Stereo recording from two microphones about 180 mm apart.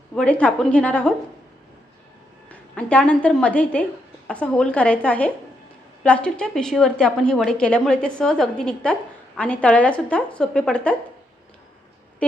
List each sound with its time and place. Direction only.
0.1 s a woman's voice: 5° left (ahead or behind)
2.5 s a woman's voice: 5° left (ahead or behind)